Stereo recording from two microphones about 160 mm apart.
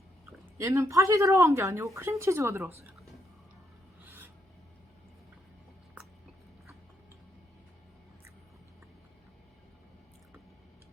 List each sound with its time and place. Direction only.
0.3 s speech: 20° right (ahead or behind)
4.0 s filing: 15° right (ahead or behind)